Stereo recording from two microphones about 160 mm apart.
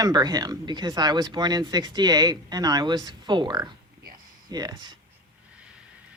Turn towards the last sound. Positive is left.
turn(degrees=-25)  # may be behind; listen again after turning